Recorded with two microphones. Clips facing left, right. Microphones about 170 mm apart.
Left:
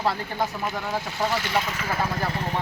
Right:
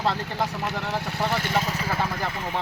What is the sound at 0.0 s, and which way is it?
Speech, 5° left (ahead or behind).